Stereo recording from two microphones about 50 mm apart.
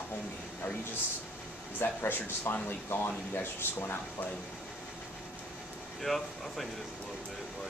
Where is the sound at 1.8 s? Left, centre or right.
Left.